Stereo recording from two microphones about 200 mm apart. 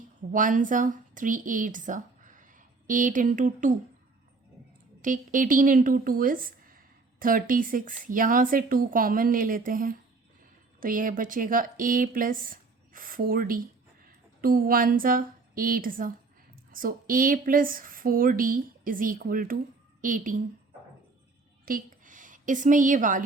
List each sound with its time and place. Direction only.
0.3 s a woman's voice: 40° right (ahead or behind)
5.0 s a woman's voice: 40° right (ahead or behind)
21.6 s a sound: 45° right (ahead or behind)